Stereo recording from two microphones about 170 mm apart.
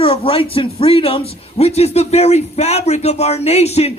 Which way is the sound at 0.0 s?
35° left (ahead or behind).